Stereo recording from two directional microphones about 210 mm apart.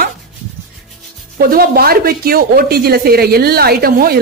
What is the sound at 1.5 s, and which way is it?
Speech, 45° right (ahead or behind).